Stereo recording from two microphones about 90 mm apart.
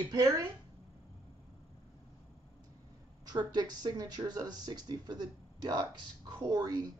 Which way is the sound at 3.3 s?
50° right (ahead or behind).